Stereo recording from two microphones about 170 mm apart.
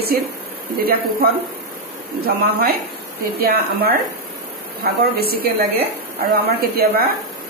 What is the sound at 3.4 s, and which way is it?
A woman's voice, 65° right (ahead or behind).